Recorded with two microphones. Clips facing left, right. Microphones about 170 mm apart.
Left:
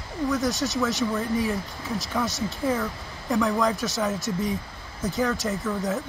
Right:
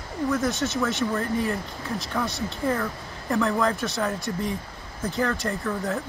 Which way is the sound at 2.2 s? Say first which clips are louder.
Left 1 dB; 40° left (ahead or behind).